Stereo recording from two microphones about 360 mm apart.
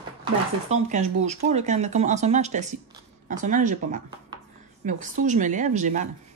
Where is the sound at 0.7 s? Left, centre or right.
Centre.